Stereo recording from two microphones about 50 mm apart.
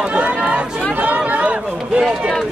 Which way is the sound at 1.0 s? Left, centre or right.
Right.